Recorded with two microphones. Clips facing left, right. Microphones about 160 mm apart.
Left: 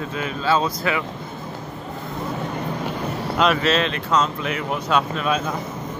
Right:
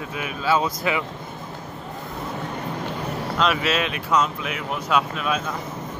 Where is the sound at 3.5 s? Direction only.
10° right (ahead or behind).